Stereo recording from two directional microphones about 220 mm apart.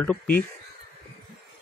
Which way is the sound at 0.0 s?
5° left (ahead or behind).